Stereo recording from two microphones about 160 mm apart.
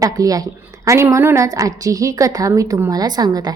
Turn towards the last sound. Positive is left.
turn(degrees=-25)  # may be behind; listen again after turning